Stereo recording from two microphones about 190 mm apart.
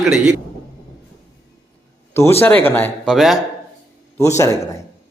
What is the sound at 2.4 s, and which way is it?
Speech, 10° left (ahead or behind).